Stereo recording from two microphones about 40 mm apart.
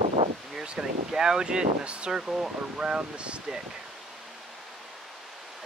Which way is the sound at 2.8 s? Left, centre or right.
Right.